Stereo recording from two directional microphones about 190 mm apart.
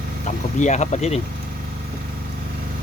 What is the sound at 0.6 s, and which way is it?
Speech, 40° left (ahead or behind).